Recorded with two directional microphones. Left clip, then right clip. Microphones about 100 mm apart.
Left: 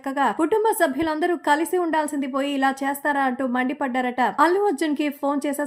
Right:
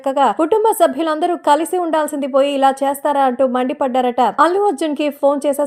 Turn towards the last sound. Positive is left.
turn(degrees=-25)  # may be behind; listen again after turning